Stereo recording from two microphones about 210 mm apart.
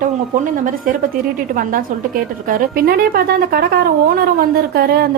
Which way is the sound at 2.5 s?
45° right (ahead or behind).